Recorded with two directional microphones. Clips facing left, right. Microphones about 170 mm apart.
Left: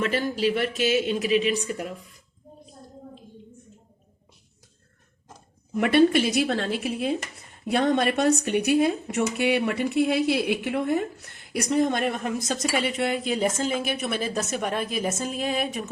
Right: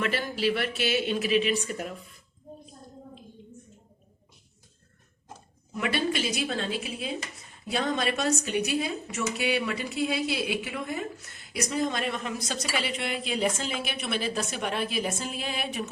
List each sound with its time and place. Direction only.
0.0 s speech: 40° left (ahead or behind)
5.7 s speech: 55° left (ahead or behind); by 15.9 s 40° left (ahead or behind)